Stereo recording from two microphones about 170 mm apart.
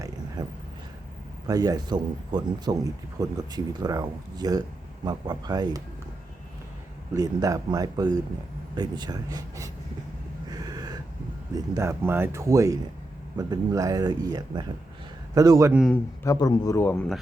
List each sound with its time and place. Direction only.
0.4 s speech: 25° right (ahead or behind)
7.1 s speech: 20° right (ahead or behind)
10.5 s a sound: 20° right (ahead or behind)
11.5 s speech: 20° right (ahead or behind)
16.2 s a man's voice: 20° left (ahead or behind)